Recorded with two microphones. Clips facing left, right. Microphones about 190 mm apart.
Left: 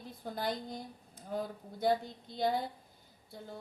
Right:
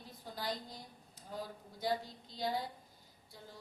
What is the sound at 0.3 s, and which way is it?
A woman's voice, 55° left (ahead or behind).